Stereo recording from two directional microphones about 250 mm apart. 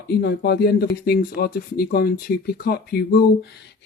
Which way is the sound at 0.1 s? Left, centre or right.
Left.